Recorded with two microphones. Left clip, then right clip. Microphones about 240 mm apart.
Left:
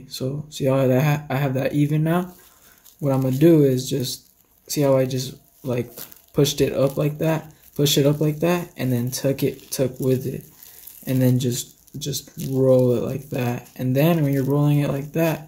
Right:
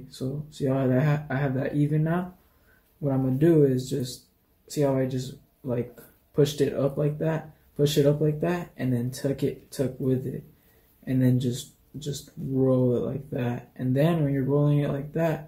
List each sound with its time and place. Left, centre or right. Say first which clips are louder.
0.1 s speech: left 6 dB; left